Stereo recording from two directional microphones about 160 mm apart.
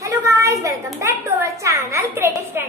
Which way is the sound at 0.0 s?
20° right (ahead or behind).